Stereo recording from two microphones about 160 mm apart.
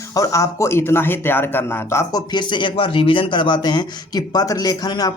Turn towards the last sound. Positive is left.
turn(degrees=25)  # may be behind; listen again after turning